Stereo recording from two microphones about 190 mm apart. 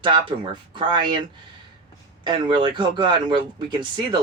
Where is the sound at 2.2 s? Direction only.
25° right (ahead or behind).